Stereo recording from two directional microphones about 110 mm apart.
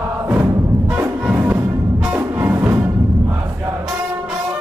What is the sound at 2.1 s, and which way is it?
Music, 20° right (ahead or behind).